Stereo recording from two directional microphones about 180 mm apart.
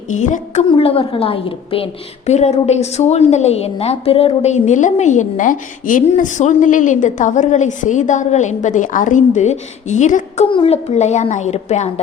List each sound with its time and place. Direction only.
0.1 s a woman's voice: 45° left (ahead or behind)